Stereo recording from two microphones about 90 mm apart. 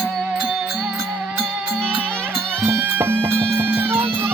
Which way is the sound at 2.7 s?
25° right (ahead or behind).